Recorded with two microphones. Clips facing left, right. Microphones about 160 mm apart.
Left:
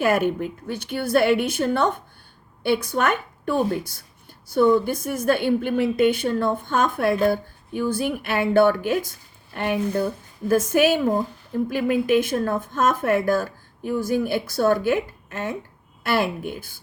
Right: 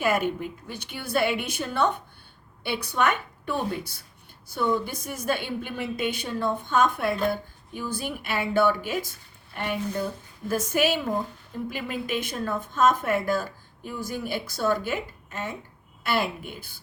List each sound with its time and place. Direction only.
0.0 s a woman's voice: 50° left (ahead or behind)